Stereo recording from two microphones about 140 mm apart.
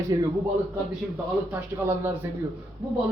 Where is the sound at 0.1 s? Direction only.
30° right (ahead or behind).